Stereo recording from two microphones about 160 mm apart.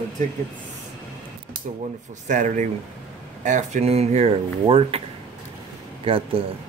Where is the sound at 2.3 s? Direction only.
50° right (ahead or behind).